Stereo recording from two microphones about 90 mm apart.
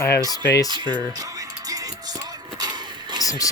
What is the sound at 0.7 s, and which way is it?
Speech, 55° right (ahead or behind).